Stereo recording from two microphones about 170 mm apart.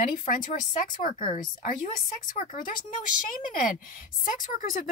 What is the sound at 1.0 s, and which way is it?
Speech, 55° left (ahead or behind).